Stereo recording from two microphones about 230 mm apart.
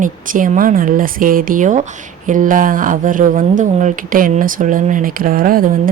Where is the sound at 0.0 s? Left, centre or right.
Right.